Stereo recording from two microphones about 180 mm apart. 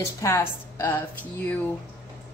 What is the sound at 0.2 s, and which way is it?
Speech, 15° left (ahead or behind).